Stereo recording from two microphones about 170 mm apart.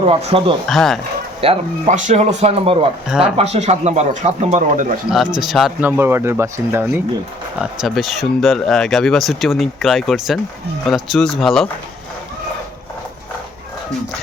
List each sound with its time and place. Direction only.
0.0 s speech: 35° right (ahead or behind)
0.7 s speech: centre (ahead or behind)
1.4 s speech: 35° right (ahead or behind)
3.1 s speech: 5° right (ahead or behind)
3.3 s speech: 40° right (ahead or behind)
5.1 s speech: centre (ahead or behind)
6.0 s speech: 15° right (ahead or behind)
7.6 s speech: centre (ahead or behind)